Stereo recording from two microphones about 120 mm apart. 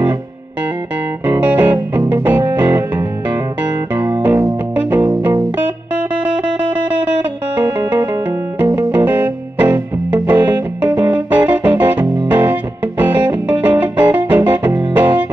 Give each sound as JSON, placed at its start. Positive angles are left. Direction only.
{"t": 1.2, "sound": "music", "side_deg": -15}
{"t": 4.7, "sound": "music", "side_deg": -20}
{"t": 8.6, "sound": "music", "side_deg": -20}